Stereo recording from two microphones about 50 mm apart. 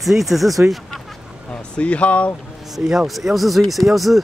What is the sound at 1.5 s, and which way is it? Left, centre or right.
Speech, left.